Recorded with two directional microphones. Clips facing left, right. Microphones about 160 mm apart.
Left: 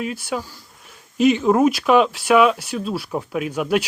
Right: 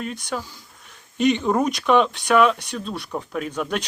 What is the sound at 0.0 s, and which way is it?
Speech, 5° left (ahead or behind).